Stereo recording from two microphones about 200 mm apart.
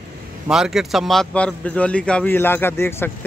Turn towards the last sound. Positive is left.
turn(degrees=10)  # may be behind; listen again after turning